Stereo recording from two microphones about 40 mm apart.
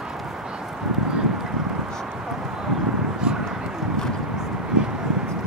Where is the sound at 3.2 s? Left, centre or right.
Right.